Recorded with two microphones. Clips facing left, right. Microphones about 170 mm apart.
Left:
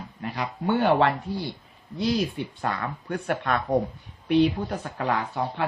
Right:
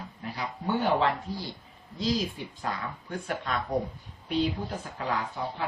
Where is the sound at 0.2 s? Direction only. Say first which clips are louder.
Left 6 dB; 65° left (ahead or behind).